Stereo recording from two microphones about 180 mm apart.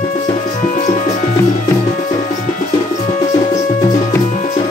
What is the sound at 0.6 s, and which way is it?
Music, 45° left (ahead or behind).